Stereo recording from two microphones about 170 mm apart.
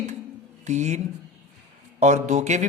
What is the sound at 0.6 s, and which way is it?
Speech, 45° right (ahead or behind).